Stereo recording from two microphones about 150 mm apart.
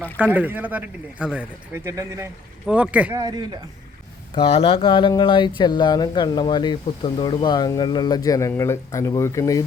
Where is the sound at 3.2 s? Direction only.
25° right (ahead or behind).